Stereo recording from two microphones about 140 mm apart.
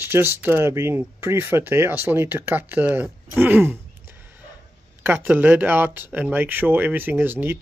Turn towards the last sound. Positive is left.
turn(degrees=-15)  # may be behind; listen again after turning